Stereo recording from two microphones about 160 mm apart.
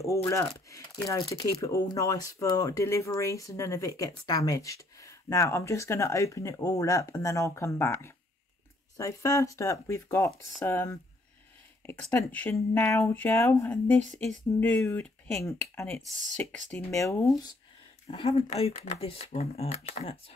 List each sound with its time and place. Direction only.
0.3 s speech: 20° left (ahead or behind)
18.0 s speech: 40° left (ahead or behind)